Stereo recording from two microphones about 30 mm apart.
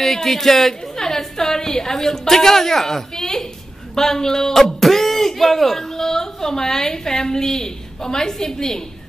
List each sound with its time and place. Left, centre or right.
0.0 s a woman's voice: centre